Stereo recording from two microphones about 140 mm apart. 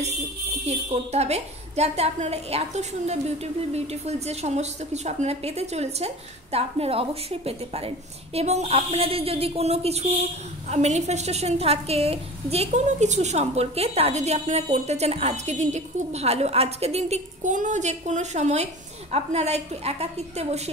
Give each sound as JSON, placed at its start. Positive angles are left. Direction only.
{"t": 0.7, "sound": "a woman's voice", "side_deg": -50}